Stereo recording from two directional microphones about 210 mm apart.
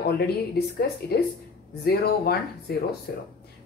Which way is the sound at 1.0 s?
50° left (ahead or behind).